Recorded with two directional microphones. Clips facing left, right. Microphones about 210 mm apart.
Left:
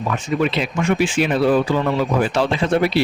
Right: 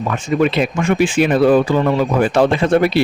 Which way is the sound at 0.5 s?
50° right (ahead or behind).